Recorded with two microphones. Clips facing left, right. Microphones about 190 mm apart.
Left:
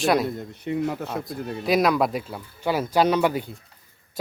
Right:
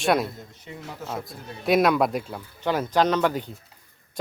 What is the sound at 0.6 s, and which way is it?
Speech, 65° left (ahead or behind).